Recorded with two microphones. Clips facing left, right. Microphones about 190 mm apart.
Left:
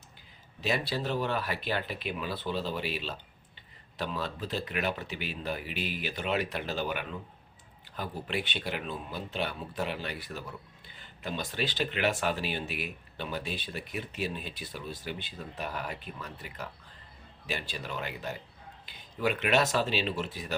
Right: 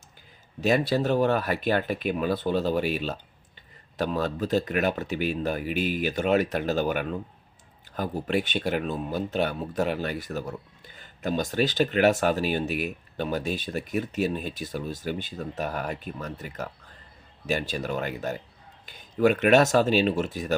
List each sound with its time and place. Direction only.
0.6 s speech: 45° right (ahead or behind)